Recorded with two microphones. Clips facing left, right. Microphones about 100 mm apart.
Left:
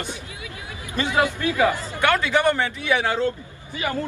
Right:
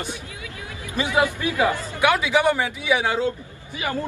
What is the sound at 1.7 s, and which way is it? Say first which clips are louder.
Speech: right 1 dB; 20° left (ahead or behind).